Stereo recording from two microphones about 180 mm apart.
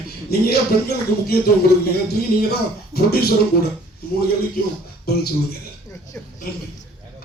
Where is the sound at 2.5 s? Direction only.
60° left (ahead or behind).